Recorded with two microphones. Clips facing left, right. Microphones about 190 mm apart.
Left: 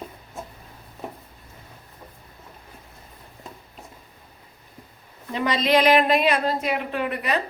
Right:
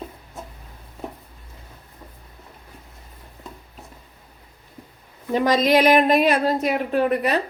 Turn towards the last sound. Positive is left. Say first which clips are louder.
# right 6 dB
turn(degrees=-40)  # may be behind; listen again after turning